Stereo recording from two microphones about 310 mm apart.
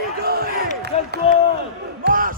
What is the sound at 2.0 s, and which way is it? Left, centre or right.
Battle cry, right.